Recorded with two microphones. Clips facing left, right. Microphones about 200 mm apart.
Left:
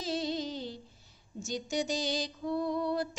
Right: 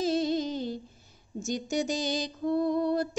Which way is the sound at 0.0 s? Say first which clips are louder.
Right 7 dB; 50° right (ahead or behind).